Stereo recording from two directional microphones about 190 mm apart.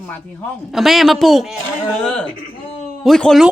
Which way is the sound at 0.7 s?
Centre (ahead or behind).